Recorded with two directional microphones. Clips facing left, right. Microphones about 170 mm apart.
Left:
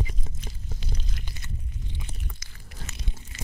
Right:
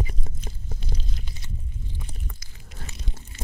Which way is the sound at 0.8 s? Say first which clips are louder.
Even; 70° left (ahead or behind).